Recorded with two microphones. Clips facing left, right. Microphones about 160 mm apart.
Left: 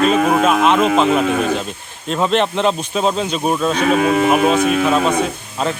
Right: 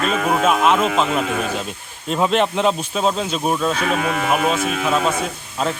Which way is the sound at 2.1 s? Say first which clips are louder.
Left 1 dB; 5° right (ahead or behind).